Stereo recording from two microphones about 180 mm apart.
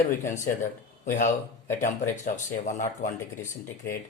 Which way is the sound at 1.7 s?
45° left (ahead or behind).